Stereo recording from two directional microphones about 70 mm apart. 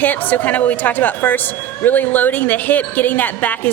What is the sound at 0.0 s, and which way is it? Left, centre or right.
A woman's voice, left.